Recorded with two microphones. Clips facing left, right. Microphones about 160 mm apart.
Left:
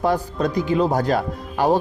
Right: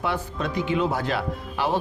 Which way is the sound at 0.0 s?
40° left (ahead or behind).